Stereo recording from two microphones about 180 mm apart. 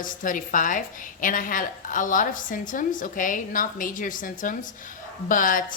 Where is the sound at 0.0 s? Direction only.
45° left (ahead or behind).